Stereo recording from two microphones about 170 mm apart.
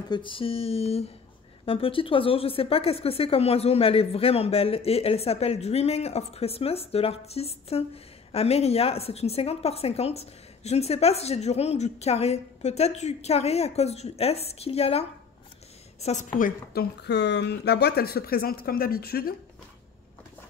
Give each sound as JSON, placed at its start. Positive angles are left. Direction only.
{"t": 0.1, "sound": "speech", "side_deg": 30}
{"t": 16.3, "sound": "a woman's voice", "side_deg": 55}
{"t": 17.0, "sound": "speech", "side_deg": 85}